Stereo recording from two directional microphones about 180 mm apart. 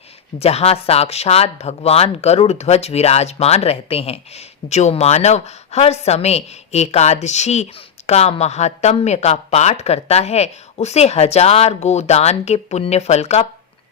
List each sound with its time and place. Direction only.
0.3 s speech: 35° left (ahead or behind)